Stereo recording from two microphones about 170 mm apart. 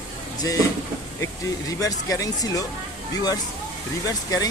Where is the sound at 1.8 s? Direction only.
20° left (ahead or behind).